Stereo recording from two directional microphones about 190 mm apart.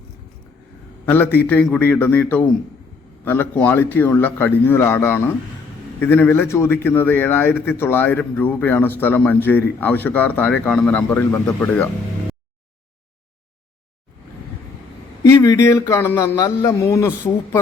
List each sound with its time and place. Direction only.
1.0 s a man's voice: 10° left (ahead or behind)
15.2 s a man's voice: 15° left (ahead or behind)